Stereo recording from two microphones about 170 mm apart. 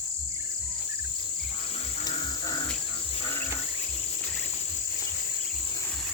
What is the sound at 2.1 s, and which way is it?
Cricket, 25° left (ahead or behind).